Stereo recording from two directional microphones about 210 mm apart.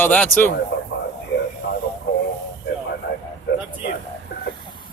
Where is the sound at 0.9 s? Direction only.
65° left (ahead or behind).